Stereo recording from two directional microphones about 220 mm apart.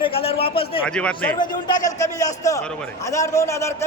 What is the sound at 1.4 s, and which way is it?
A man's voice, 20° left (ahead or behind).